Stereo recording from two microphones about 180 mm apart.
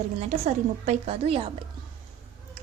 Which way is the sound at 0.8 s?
35° right (ahead or behind).